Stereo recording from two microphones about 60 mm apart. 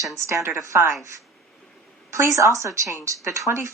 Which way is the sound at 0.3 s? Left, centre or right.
Right.